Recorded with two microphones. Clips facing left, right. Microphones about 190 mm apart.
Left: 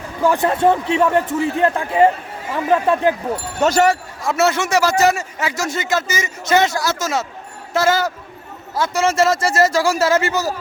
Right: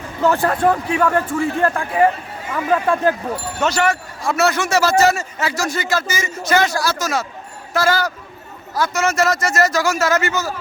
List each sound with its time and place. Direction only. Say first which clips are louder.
0.2 s speech: even; 10° left (ahead or behind)
0.4 s a man's voice: left 1 dB; 25° left (ahead or behind)
3.6 s speech: left 4 dB; 40° left (ahead or behind)
4.2 s a man's voice: even; 20° left (ahead or behind)